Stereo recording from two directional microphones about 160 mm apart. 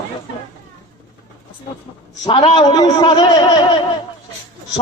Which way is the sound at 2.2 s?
35° left (ahead or behind).